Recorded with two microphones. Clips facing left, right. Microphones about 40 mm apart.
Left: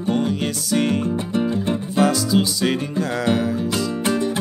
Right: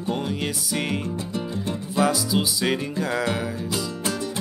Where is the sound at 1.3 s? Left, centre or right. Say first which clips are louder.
Left 7 dB; left.